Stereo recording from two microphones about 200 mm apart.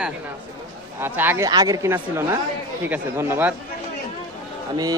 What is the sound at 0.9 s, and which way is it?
Speech, 10° right (ahead or behind).